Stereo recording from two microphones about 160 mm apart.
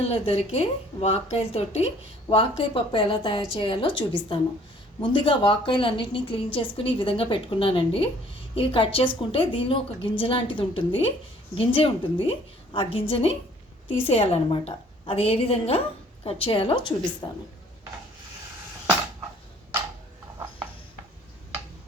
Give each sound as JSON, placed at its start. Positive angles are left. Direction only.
{"t": 0.0, "sound": "a woman's voice", "side_deg": 40}